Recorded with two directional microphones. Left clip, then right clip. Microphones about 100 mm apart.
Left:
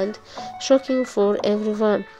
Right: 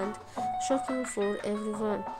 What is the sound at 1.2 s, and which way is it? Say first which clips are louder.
Speech: left 13 dB; 60° left (ahead or behind).